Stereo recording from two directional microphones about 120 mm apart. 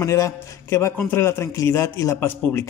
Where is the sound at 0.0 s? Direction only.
25° left (ahead or behind).